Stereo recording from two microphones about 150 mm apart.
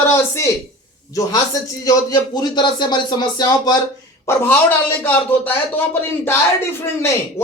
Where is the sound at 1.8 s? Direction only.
25° left (ahead or behind).